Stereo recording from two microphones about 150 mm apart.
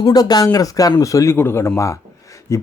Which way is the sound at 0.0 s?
25° left (ahead or behind).